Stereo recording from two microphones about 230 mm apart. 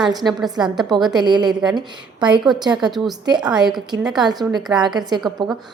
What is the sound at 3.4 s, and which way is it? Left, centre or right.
Speech, centre.